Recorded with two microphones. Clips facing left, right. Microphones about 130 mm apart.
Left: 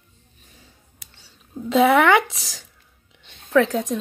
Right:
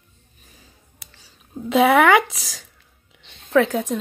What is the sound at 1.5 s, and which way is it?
Speech, 10° right (ahead or behind).